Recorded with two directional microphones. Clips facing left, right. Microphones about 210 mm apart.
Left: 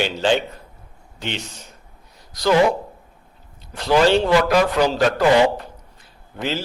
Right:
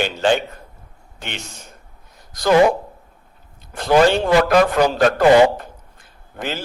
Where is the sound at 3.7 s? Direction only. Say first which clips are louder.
Right 1 dB; 50° right (ahead or behind).